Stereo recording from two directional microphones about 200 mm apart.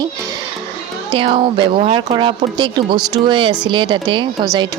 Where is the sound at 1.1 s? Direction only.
25° right (ahead or behind).